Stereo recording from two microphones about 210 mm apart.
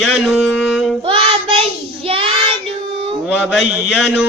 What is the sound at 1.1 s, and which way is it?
Child singing, 25° right (ahead or behind).